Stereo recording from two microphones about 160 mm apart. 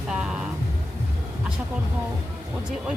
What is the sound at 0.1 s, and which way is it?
Music, 5° right (ahead or behind).